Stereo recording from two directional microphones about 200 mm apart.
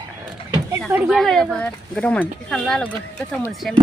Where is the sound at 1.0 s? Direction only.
Centre (ahead or behind).